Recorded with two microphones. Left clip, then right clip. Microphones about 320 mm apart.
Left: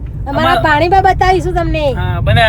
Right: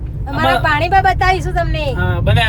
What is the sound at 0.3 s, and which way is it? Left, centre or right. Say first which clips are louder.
A woman's voice: left 3 dB; left.